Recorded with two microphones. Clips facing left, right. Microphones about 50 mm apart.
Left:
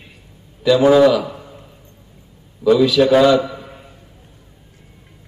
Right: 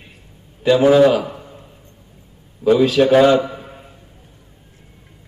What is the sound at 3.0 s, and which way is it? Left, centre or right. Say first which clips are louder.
Mantra: even; centre.